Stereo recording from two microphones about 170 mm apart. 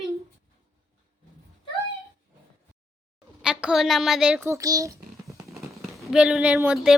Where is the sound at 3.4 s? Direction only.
5° right (ahead or behind).